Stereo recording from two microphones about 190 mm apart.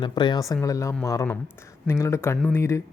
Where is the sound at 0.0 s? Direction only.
25° left (ahead or behind).